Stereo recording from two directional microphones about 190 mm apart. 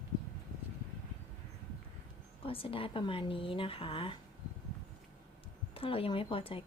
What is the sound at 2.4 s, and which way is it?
Speech, 30° left (ahead or behind).